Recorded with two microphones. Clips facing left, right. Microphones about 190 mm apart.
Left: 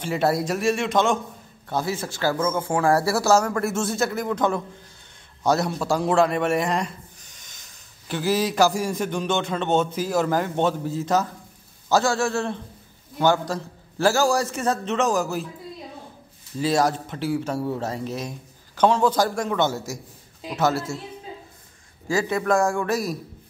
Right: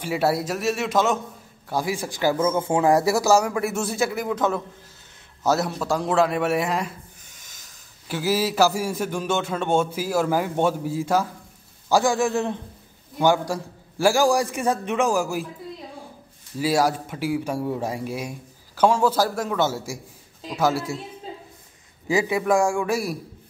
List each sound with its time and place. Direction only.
0.0 s a man's voice: 5° right (ahead or behind)
3.6 s speech: centre (ahead or behind)
8.1 s a man's voice: 10° right (ahead or behind)
16.5 s a man's voice: 10° right (ahead or behind)
22.0 s a man's voice: 15° right (ahead or behind)